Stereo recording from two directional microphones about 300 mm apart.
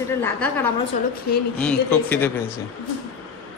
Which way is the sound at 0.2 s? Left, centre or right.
Centre.